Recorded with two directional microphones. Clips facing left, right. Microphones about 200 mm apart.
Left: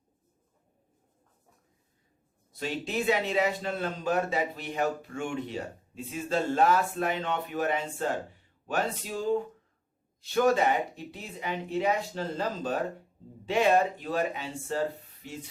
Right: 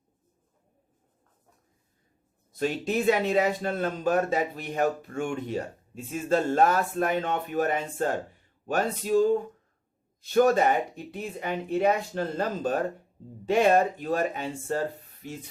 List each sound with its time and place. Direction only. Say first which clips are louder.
2.6 s a man's voice: right 5 dB; 45° right (ahead or behind)
10.3 s a man's voice: right 3 dB; 45° right (ahead or behind)